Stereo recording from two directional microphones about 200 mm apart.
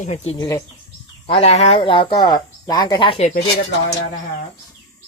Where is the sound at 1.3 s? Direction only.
30° left (ahead or behind).